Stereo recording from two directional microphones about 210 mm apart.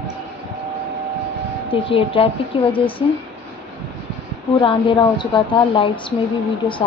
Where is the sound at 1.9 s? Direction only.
25° left (ahead or behind).